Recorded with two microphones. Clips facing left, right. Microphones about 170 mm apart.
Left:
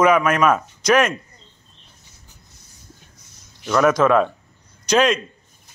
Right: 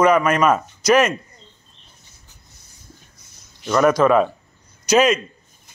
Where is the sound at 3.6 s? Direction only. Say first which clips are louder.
Right 1 dB; centre (ahead or behind).